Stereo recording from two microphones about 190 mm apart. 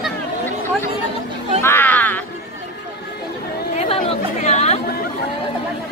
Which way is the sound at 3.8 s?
30° left (ahead or behind).